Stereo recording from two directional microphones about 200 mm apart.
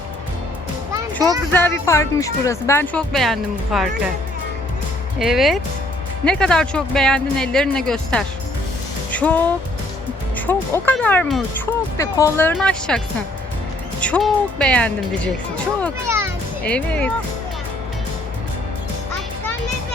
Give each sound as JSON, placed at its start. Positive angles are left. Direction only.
{"t": 0.9, "sound": "music", "side_deg": -15}
{"t": 1.5, "sound": "speech", "side_deg": 10}
{"t": 5.2, "sound": "speech", "side_deg": 0}
{"t": 11.9, "sound": "speech", "side_deg": 15}
{"t": 16.0, "sound": "a child's voice", "side_deg": -15}
{"t": 16.6, "sound": "speech", "side_deg": 5}